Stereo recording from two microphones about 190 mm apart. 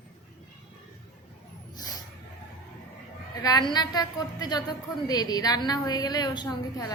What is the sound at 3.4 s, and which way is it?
A woman's voice, 20° left (ahead or behind).